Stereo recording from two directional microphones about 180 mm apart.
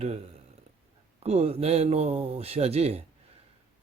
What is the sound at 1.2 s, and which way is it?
Speech, 35° right (ahead or behind).